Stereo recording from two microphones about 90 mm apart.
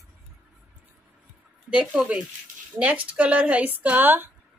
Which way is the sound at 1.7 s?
10° right (ahead or behind).